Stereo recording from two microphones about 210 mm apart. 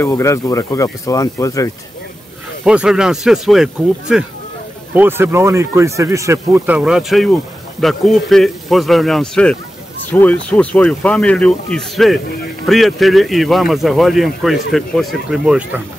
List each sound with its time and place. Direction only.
0.0 s speech: 15° left (ahead or behind)
2.6 s a man's voice: 5° right (ahead or behind)